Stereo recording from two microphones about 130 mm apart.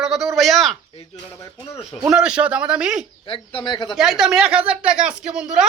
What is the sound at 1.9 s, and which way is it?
Speech, 5° right (ahead or behind).